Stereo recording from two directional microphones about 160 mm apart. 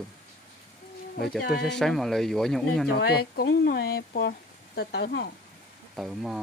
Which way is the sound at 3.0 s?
85° left.